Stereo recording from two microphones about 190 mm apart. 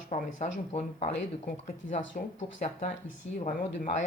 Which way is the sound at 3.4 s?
35° left (ahead or behind).